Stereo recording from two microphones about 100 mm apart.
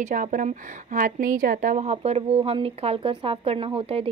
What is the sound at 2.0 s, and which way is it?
Speech, 90° right.